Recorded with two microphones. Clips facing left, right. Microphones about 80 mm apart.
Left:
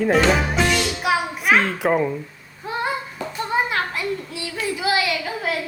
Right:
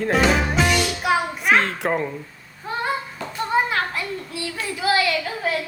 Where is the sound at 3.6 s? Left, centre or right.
Centre.